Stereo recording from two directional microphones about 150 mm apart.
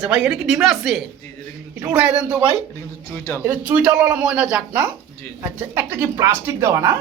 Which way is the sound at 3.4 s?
10° right (ahead or behind).